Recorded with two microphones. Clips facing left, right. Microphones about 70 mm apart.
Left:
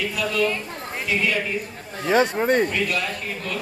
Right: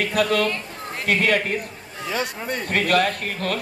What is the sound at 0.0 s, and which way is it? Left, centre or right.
A man's voice, right.